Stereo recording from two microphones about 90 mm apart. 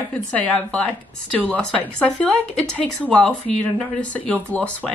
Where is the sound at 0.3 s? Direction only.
10° left (ahead or behind).